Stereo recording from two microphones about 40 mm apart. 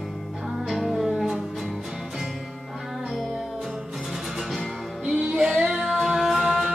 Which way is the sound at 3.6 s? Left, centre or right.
Centre.